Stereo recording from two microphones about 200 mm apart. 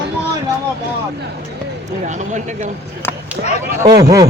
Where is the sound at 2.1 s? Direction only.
35° right (ahead or behind).